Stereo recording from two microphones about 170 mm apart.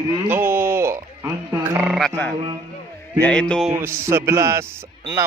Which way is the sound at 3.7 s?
15° right (ahead or behind).